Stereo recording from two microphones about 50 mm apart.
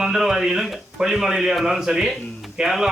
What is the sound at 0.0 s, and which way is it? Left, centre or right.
A man's voice, centre.